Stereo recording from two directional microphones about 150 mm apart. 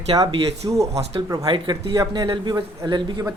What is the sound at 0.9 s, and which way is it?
Speech, 45° right (ahead or behind).